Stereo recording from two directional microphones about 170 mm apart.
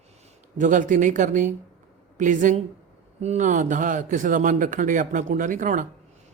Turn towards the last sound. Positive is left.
turn(degrees=-50)  # may be behind; listen again after turning